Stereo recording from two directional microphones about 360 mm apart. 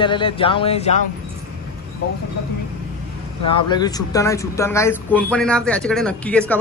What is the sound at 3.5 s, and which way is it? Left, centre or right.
Speech, centre.